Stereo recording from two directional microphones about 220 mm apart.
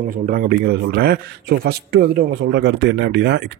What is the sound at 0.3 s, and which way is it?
A man's voice, 45° right (ahead or behind).